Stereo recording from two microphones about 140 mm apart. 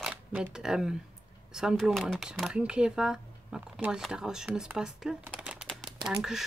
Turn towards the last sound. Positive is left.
turn(degrees=-5)  # may be behind; listen again after turning